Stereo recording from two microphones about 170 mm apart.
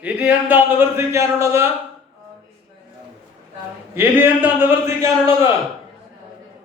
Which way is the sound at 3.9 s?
10° right (ahead or behind).